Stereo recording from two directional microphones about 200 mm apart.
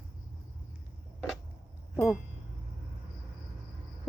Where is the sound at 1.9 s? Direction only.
10° left (ahead or behind).